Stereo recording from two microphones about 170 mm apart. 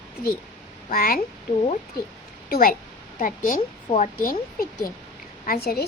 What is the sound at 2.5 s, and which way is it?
A woman's voice, 60° left (ahead or behind).